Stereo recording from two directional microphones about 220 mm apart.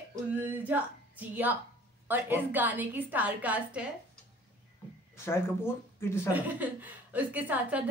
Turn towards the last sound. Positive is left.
turn(degrees=-5)  # may be behind; listen again after turning